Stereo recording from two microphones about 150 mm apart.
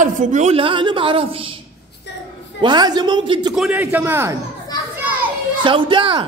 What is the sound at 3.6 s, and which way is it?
Speech, 10° right (ahead or behind).